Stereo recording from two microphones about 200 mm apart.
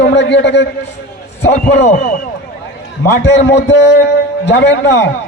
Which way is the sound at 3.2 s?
60° left (ahead or behind).